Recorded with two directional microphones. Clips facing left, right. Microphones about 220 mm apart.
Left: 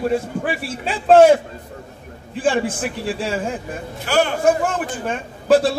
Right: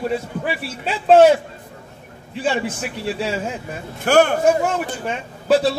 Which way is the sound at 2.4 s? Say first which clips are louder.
Left 3 dB; 50° left (ahead or behind).